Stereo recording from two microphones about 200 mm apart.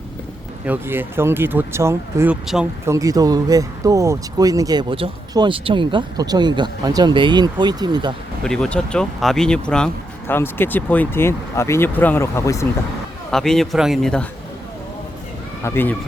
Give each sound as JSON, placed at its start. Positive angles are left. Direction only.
{"t": 0.6, "sound": "speech", "side_deg": -10}
{"t": 2.9, "sound": "speech", "side_deg": -15}
{"t": 8.4, "sound": "speech", "side_deg": 5}
{"t": 13.3, "sound": "a man's voice", "side_deg": 0}
{"t": 15.6, "sound": "speech", "side_deg": 10}